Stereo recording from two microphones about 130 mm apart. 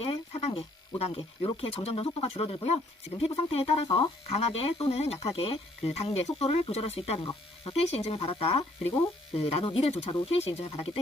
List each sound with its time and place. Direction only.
0.0 s electric shaver: 50° left (ahead or behind)
1.6 s speech: 50° left (ahead or behind)